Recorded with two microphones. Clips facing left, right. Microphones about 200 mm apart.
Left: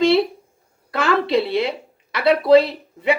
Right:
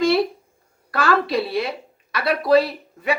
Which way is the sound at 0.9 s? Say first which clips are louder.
Left 1 dB; 20° left (ahead or behind).